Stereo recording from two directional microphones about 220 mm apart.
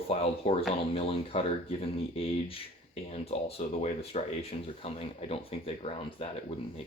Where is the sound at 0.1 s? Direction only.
30° left (ahead or behind).